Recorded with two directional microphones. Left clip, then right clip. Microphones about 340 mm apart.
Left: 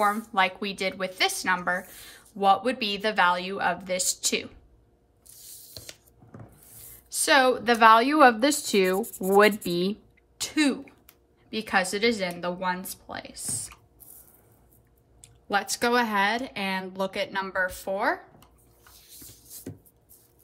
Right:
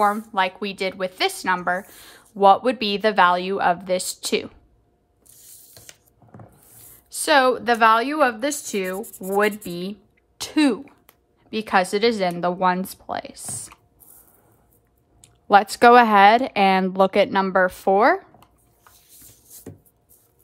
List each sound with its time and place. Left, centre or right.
0.0 s a woman's voice: centre
6.7 s a woman's voice: centre
15.4 s a woman's voice: centre
18.9 s a sound: centre